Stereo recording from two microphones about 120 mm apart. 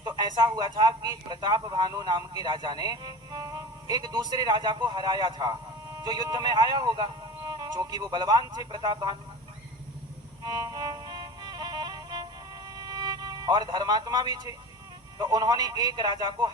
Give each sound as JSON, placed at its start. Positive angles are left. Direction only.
{"t": 0.0, "sound": "speech", "side_deg": -35}
{"t": 10.4, "sound": "music", "side_deg": -30}
{"t": 15.2, "sound": "speech", "side_deg": -35}